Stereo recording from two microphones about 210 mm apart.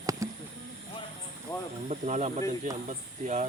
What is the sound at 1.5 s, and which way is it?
Speech, 20° left (ahead or behind).